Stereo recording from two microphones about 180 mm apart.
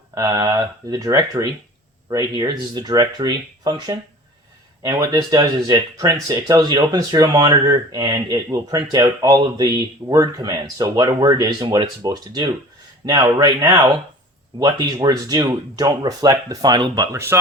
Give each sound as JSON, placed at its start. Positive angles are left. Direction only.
{"t": 0.1, "sound": "speech", "side_deg": -20}